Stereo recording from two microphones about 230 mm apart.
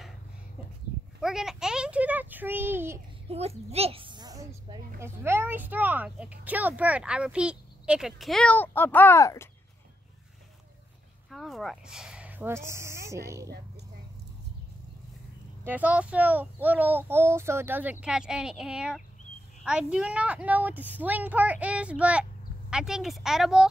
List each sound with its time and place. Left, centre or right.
1.2 s speech: centre
3.3 s a sound: right
5.0 s speech: centre
11.2 s speech: centre
15.6 s speech: centre